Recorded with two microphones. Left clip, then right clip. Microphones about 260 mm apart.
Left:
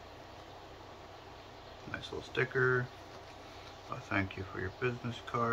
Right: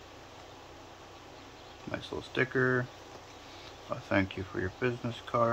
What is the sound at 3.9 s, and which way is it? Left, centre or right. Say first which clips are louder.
Speech: right 5 dB; right.